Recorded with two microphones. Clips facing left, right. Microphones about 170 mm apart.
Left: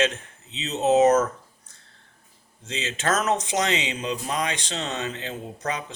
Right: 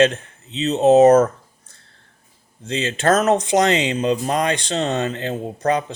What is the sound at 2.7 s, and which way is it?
Speech, 60° right (ahead or behind).